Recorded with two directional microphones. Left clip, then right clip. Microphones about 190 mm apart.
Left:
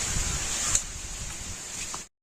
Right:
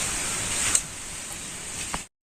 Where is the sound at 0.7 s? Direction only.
5° right (ahead or behind).